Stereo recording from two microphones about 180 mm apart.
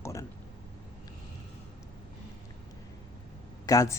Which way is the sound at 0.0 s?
15° left (ahead or behind).